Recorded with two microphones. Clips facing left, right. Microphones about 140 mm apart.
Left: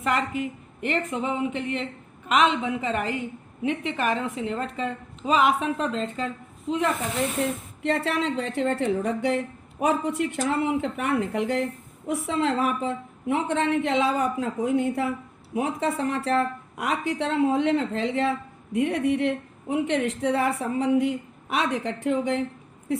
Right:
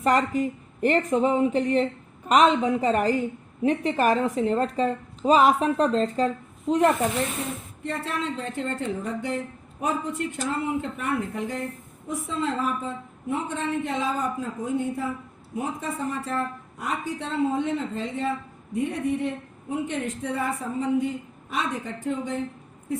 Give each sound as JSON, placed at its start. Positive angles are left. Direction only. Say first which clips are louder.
{"t": 0.0, "sound": "a woman's voice", "louder": "right 4 dB", "side_deg": -40}
{"t": 7.8, "sound": "a woman's voice", "louder": "left 5 dB", "side_deg": 75}
{"t": 22.9, "sound": "a sound", "louder": "left 2 dB", "side_deg": 75}